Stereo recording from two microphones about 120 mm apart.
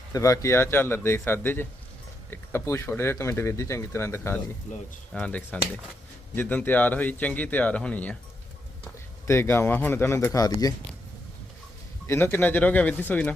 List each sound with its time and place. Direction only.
0.1 s speech: 25° left (ahead or behind)
5.1 s speech: 10° left (ahead or behind)
9.2 s speech: 20° left (ahead or behind)
12.0 s speech: 20° left (ahead or behind)